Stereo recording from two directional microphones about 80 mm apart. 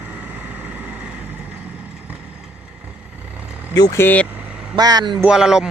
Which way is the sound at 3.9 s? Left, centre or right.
Left.